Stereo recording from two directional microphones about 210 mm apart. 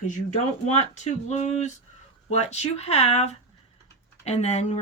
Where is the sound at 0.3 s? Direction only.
35° left (ahead or behind).